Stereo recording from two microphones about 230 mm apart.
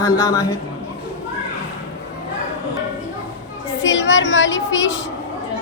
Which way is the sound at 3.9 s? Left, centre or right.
Left.